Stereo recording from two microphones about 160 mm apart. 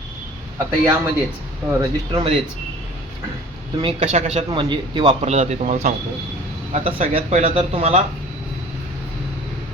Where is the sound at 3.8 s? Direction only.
35° right (ahead or behind).